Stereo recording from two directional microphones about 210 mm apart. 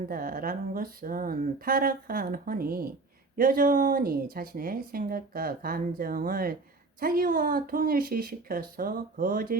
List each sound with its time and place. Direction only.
0.1 s speech: 45° right (ahead or behind)